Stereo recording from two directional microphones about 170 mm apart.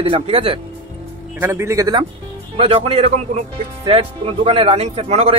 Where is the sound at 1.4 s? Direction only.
15° right (ahead or behind).